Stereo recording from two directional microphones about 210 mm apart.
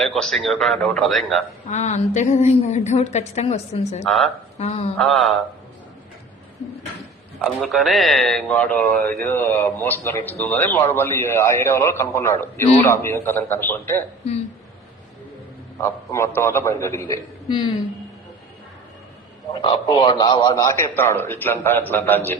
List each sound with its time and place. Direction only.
0.0 s speech: centre (ahead or behind)
1.7 s a woman's voice: 35° left (ahead or behind)
4.9 s speech: centre (ahead or behind)
7.4 s a man's voice: centre (ahead or behind)
15.8 s a man's voice: 10° left (ahead or behind)
19.5 s a man's voice: 25° left (ahead or behind)